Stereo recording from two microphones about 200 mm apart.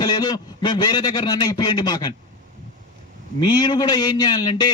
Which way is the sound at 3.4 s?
25° left (ahead or behind).